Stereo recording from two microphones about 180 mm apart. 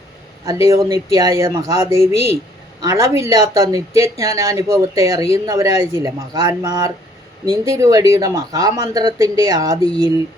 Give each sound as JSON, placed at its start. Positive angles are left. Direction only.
{"t": 0.4, "sound": "speech", "side_deg": -20}
{"t": 2.1, "sound": "a woman's voice", "side_deg": 35}
{"t": 2.8, "sound": "speech", "side_deg": -15}